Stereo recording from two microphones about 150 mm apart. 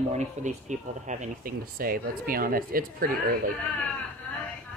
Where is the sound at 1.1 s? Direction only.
65° right (ahead or behind).